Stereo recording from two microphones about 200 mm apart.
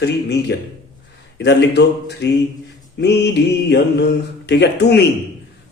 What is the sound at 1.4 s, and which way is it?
A man's voice, 60° left (ahead or behind).